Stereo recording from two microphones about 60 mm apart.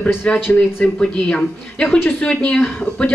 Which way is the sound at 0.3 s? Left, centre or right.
Centre.